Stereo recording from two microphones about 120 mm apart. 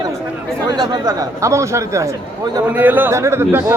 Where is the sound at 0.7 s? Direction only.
30° right (ahead or behind).